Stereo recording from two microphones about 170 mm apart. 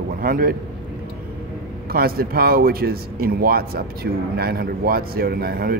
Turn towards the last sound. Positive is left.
turn(degrees=-65)  # may be behind; listen again after turning